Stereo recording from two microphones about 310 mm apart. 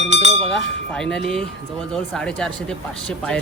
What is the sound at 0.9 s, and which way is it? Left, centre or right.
Speech, centre.